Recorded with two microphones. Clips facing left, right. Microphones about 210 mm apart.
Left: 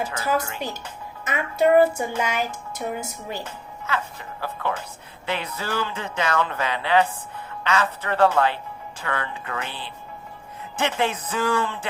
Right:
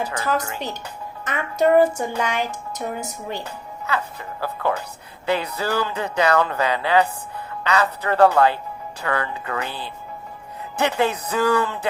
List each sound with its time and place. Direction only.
0.2 s speech: 10° left (ahead or behind)
3.9 s music: 40° right (ahead or behind)
5.2 s a sound: 40° right (ahead or behind)
5.5 s speech: 40° right (ahead or behind)